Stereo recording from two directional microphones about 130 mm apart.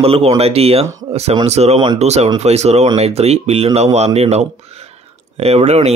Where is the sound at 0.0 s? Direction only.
50° right (ahead or behind).